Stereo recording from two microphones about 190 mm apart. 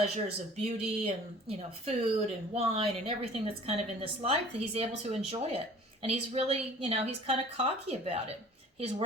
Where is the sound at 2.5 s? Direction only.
30° right (ahead or behind).